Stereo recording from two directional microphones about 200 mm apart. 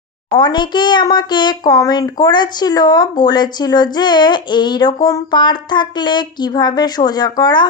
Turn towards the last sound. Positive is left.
turn(degrees=20)  # may be behind; listen again after turning